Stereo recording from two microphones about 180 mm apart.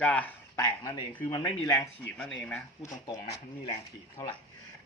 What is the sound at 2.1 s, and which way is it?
Speech, 5° left (ahead or behind).